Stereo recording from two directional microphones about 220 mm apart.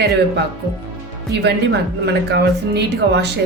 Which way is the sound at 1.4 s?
50° right (ahead or behind).